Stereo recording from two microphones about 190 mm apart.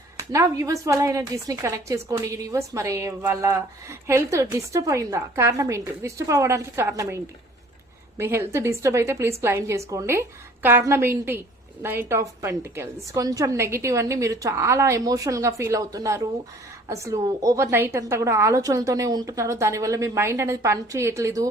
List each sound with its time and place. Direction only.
0.2 s a woman's voice: 20° right (ahead or behind)
8.2 s a woman's voice: 10° right (ahead or behind)